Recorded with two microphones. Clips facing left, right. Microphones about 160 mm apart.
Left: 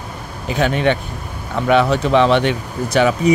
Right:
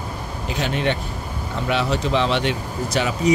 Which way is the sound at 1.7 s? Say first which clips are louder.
Left 7 dB; 55° left (ahead or behind).